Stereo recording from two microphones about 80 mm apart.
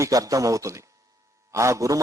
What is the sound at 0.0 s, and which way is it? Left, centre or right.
A man's voice, right.